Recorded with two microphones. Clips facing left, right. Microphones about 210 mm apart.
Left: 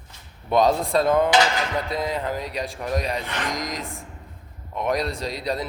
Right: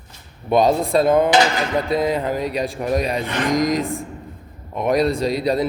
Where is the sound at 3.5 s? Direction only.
60° right (ahead or behind).